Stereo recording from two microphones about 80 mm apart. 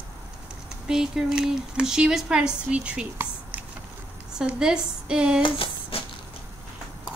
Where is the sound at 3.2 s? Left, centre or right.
Centre.